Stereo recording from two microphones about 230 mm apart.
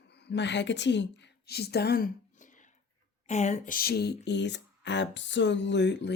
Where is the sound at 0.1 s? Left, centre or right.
Left.